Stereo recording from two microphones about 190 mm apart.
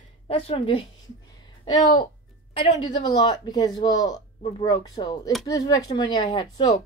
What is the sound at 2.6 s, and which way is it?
Speech, 25° left (ahead or behind).